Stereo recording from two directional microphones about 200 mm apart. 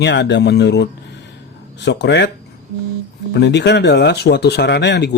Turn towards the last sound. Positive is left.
turn(degrees=60)  # may be behind; listen again after turning